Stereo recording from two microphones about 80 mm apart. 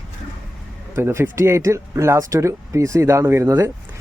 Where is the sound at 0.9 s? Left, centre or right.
Right.